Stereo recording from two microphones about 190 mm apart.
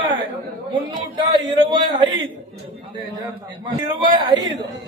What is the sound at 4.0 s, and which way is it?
Speech, 25° right (ahead or behind).